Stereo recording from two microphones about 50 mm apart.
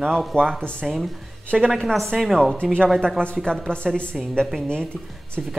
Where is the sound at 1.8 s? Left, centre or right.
Centre.